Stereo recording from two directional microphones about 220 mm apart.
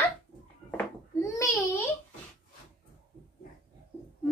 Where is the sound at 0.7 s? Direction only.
10° left (ahead or behind).